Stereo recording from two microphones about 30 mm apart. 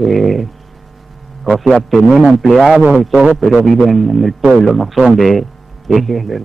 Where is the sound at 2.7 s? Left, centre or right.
Right.